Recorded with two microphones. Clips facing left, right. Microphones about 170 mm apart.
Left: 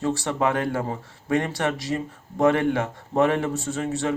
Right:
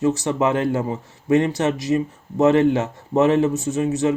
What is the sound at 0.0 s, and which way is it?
A man's voice, 20° right (ahead or behind).